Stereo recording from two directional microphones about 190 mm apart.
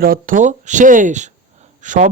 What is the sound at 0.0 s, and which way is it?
Speech, 50° right (ahead or behind).